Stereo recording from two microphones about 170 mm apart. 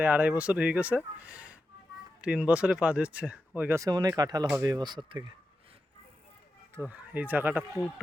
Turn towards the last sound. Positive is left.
turn(degrees=-10)  # may be behind; listen again after turning